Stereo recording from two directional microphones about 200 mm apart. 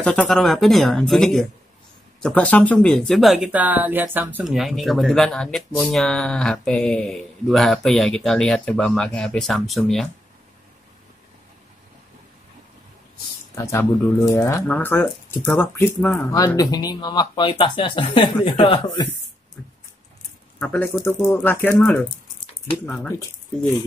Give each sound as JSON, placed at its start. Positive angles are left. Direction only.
{"t": 0.0, "sound": "speech", "side_deg": 5}
{"t": 13.6, "sound": "speech", "side_deg": 15}
{"t": 20.5, "sound": "speech", "side_deg": 5}